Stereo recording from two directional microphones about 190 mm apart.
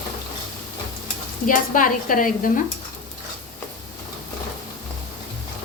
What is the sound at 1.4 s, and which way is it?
A woman's voice, 45° left (ahead or behind).